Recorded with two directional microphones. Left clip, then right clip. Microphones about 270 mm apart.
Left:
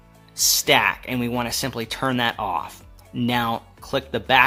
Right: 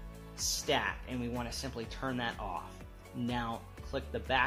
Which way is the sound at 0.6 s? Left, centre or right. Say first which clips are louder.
Left 14 dB; left.